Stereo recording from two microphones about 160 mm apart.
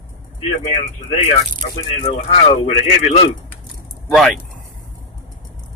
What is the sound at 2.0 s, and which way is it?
Speech, 45° left (ahead or behind).